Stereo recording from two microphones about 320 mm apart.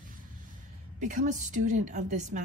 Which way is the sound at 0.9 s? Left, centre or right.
Right.